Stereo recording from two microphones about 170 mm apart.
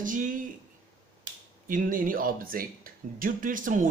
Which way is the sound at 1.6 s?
55° right (ahead or behind).